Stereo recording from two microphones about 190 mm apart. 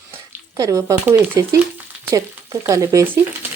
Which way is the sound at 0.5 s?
15° right (ahead or behind).